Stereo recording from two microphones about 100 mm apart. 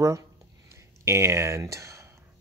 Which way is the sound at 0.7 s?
30° right (ahead or behind).